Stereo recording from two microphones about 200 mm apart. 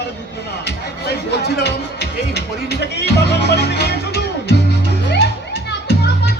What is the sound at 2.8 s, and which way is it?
Speech, 55° left (ahead or behind).